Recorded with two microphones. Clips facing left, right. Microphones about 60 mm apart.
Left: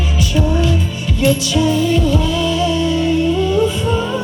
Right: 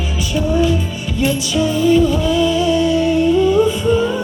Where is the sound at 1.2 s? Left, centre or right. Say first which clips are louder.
Left 2 dB; right.